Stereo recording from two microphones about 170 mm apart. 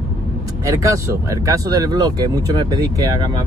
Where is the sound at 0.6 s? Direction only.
20° right (ahead or behind).